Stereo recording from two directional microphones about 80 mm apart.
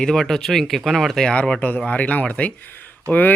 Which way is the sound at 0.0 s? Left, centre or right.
Centre.